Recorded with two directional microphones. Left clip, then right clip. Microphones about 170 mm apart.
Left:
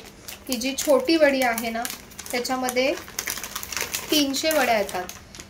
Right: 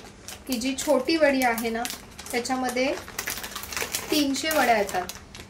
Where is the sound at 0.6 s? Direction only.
20° left (ahead or behind).